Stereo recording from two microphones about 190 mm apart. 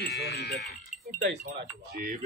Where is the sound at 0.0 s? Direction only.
60° left (ahead or behind).